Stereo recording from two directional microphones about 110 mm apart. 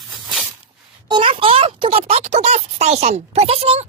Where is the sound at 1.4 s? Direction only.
60° right (ahead or behind).